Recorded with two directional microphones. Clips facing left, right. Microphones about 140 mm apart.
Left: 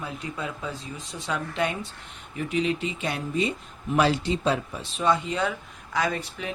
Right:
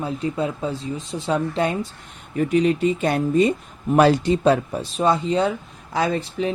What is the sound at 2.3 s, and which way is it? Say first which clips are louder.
Speech: right 8 dB; 45° right (ahead or behind).